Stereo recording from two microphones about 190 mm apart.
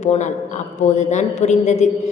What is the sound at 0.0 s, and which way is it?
A woman's voice, 35° left (ahead or behind).